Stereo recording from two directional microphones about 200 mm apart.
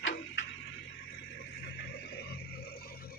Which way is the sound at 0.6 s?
60° left (ahead or behind).